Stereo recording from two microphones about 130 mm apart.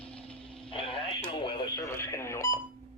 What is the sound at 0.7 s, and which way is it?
Radio, 45° left (ahead or behind).